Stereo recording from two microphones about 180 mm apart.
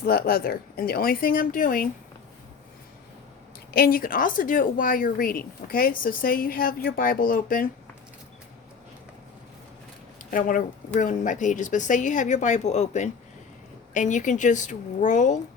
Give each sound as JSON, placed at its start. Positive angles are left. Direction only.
{"t": 0.0, "sound": "speech", "side_deg": 55}
{"t": 3.8, "sound": "speech", "side_deg": 55}
{"t": 10.3, "sound": "speech", "side_deg": 50}